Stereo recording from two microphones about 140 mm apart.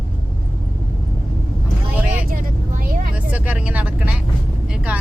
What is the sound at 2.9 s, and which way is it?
Vehicle, 90° right.